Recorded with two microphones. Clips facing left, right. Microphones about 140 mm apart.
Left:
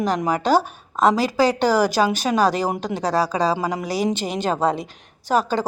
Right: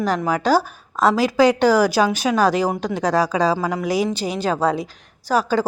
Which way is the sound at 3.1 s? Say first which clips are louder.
Right 1 dB; 15° right (ahead or behind).